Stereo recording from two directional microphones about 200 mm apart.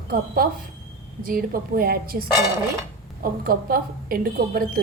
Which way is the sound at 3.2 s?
45° right (ahead or behind).